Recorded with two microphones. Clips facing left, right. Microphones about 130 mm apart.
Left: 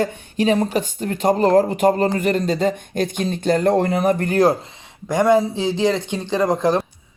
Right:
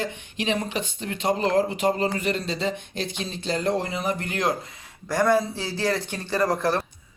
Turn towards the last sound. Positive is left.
turn(degrees=15)  # may be behind; listen again after turning